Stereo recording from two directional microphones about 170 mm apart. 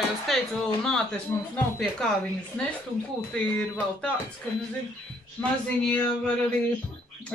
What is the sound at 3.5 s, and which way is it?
Speech, 10° left (ahead or behind).